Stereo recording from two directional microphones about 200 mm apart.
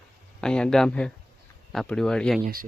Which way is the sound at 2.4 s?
45° right (ahead or behind).